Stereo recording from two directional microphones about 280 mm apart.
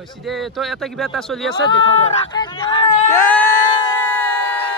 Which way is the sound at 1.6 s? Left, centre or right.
Centre.